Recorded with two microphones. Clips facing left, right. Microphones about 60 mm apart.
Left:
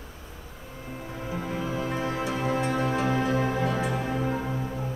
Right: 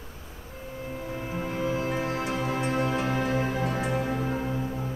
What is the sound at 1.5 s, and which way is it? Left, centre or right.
Music, left.